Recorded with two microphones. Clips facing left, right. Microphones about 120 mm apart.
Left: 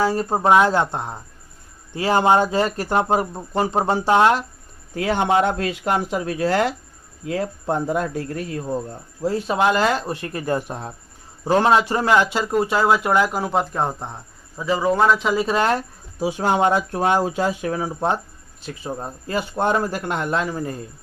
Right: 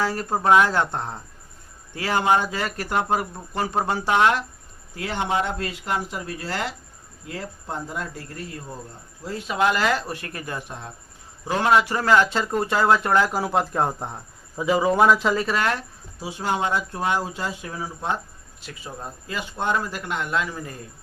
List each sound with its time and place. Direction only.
0.0 s speech: 20° left (ahead or behind)
2.0 s speech: 25° left (ahead or behind)
4.9 s speech: 55° left (ahead or behind)
9.2 s speech: 35° left (ahead or behind)
10.6 s speech: 40° left (ahead or behind); by 12.3 s 20° left (ahead or behind)
12.3 s speech: 5° left (ahead or behind)
15.5 s speech: 30° left (ahead or behind)
16.2 s speech: 55° left (ahead or behind)
18.6 s speech: 30° left (ahead or behind)